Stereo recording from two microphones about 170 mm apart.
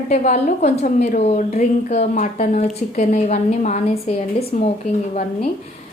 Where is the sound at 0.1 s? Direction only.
45° left (ahead or behind).